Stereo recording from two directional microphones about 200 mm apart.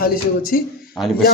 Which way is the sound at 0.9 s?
Centre (ahead or behind).